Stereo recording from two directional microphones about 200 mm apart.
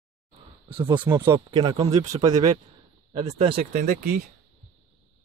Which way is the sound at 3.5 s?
45° right (ahead or behind).